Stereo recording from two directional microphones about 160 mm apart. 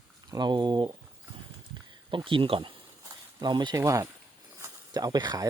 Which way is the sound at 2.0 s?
30° right (ahead or behind).